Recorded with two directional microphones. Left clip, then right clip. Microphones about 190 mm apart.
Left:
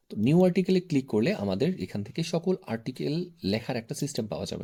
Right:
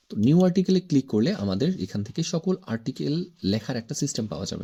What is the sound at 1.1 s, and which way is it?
Speech, 20° right (ahead or behind).